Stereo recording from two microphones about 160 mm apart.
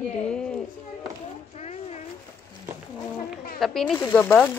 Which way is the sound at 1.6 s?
45° left (ahead or behind).